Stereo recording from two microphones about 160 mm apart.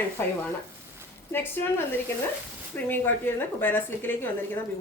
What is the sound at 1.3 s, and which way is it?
Speech, 15° left (ahead or behind).